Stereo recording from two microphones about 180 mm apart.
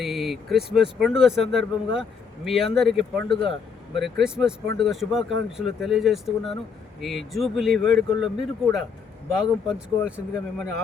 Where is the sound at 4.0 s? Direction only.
Centre (ahead or behind).